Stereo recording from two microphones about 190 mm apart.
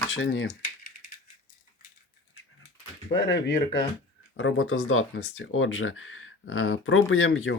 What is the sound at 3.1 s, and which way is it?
Speech, 35° left (ahead or behind).